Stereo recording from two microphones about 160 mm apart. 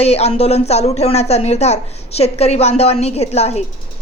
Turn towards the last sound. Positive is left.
turn(degrees=40)  # may be behind; listen again after turning